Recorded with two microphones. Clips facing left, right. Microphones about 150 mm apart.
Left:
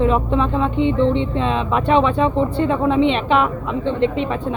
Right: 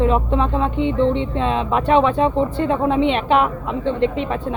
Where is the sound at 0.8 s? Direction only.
45° right (ahead or behind).